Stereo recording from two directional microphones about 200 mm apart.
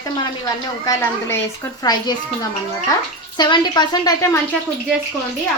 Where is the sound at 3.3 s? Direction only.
20° left (ahead or behind).